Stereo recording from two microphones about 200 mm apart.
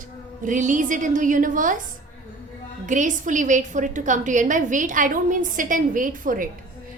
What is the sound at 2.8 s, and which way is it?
A woman's voice, 40° right (ahead or behind).